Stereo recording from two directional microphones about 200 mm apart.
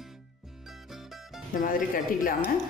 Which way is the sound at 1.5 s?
40° left (ahead or behind).